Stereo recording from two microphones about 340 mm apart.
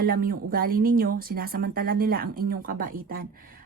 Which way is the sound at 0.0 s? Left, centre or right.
Right.